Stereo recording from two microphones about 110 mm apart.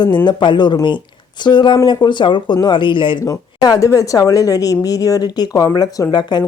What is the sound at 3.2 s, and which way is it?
Speech, 35° left (ahead or behind).